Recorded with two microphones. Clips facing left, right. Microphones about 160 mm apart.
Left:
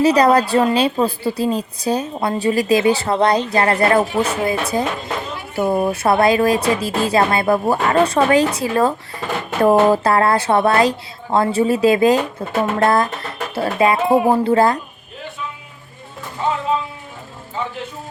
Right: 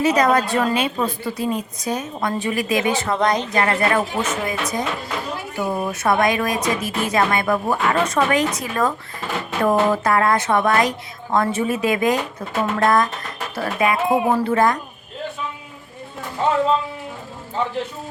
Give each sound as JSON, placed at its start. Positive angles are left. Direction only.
{"t": 0.0, "sound": "a woman's voice", "side_deg": 35}